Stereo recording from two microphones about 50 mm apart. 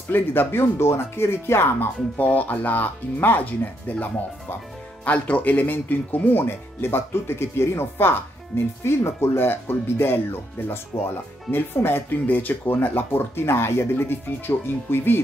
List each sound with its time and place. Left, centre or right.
0.1 s speech: left
2.1 s speech: left
5.0 s speech: left
6.4 s speech: left